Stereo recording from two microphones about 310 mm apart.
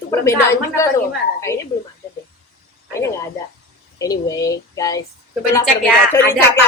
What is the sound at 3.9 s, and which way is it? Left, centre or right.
Speech, centre.